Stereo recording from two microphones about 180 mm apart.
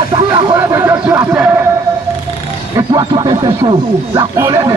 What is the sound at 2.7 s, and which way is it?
Speech, 25° right (ahead or behind).